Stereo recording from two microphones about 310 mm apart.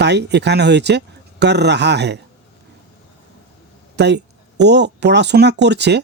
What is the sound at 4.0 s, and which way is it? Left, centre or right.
Speech, right.